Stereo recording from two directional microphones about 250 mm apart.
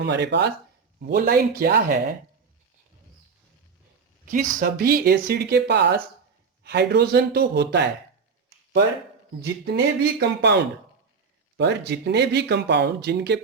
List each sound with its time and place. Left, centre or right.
0.0 s speech: right
4.3 s speech: right
9.4 s speech: right